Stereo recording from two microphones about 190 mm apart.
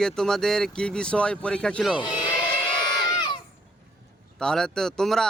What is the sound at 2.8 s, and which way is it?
Crowd, 25° left (ahead or behind).